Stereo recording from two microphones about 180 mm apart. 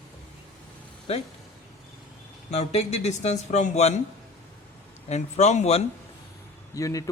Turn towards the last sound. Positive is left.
turn(degrees=20)  # may be behind; listen again after turning